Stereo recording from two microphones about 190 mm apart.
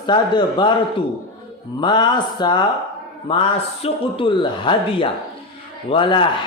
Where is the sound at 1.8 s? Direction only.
25° left (ahead or behind).